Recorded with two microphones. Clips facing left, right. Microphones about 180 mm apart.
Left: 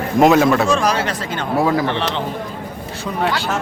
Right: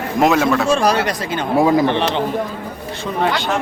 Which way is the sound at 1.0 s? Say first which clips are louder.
Right 2 dB; 15° right (ahead or behind).